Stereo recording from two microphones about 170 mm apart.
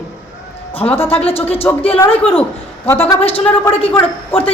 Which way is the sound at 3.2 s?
35° left (ahead or behind).